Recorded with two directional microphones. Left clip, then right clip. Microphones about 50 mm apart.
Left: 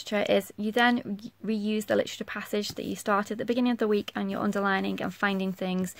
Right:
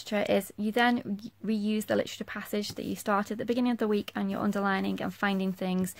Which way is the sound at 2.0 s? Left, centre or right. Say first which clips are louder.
Left 3 dB; left.